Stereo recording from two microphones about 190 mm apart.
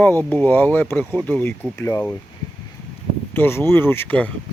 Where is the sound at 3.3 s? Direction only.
10° left (ahead or behind).